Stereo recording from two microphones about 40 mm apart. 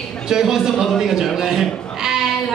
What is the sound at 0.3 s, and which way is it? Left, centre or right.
A man's voice, centre.